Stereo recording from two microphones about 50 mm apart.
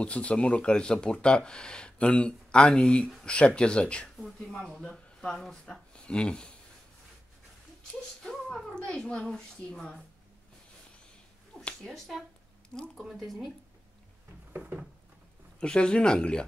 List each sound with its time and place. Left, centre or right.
0.0 s speech: left
4.2 s speech: centre
5.9 s speech: left
7.9 s a sound: centre
8.7 s a woman's voice: centre
11.8 s speech: centre
12.6 s a sound: centre
13.0 s speech: centre
15.6 s speech: centre